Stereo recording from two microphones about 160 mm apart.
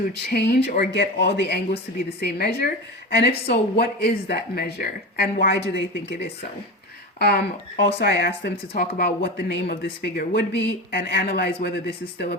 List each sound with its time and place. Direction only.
0.0 s speech: 85° left
7.2 s speech: 75° left (ahead or behind)
8.4 s speech: 75° left (ahead or behind)